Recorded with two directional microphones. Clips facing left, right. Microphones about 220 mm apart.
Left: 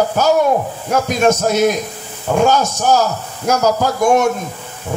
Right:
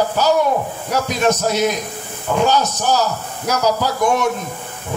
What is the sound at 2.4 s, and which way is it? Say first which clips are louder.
Speech: left 3 dB; 50° left (ahead or behind).